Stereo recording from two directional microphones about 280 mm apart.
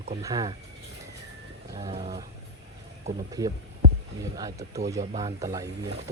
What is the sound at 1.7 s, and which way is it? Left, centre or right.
Bird, centre.